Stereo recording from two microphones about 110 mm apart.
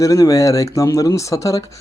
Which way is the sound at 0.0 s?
30° left (ahead or behind).